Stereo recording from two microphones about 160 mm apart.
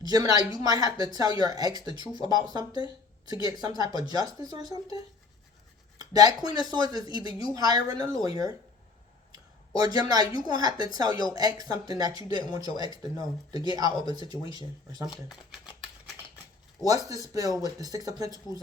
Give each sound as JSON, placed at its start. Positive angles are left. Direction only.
{"t": 0.0, "sound": "speech", "side_deg": -25}
{"t": 6.0, "sound": "speech", "side_deg": -25}
{"t": 16.8, "sound": "speech", "side_deg": -20}